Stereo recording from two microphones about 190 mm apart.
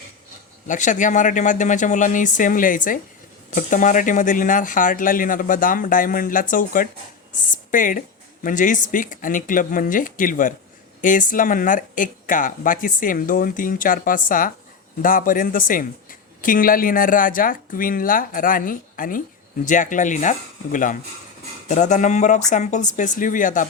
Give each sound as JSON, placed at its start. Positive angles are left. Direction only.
{"t": 0.7, "sound": "speech", "side_deg": 40}